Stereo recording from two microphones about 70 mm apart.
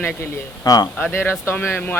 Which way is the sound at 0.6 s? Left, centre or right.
Left.